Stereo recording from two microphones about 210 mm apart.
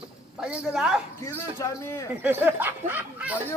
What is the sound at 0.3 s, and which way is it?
Speech, 5° right (ahead or behind).